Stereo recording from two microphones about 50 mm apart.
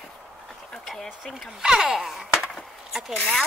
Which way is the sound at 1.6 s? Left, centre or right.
Centre.